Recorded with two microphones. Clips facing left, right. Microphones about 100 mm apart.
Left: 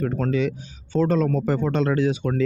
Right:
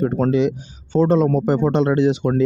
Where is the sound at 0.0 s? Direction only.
25° right (ahead or behind).